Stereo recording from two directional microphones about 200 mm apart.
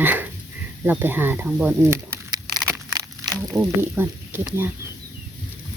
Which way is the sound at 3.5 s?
10° right (ahead or behind).